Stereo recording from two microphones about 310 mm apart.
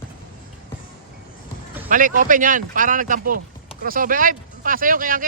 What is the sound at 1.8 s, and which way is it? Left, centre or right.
Speech, right.